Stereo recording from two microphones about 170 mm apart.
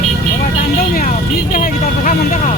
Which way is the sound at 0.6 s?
50° left (ahead or behind).